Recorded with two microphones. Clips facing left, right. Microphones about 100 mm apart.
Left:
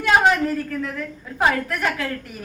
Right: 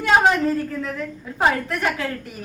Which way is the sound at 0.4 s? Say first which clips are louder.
Right 1 dB; 25° right (ahead or behind).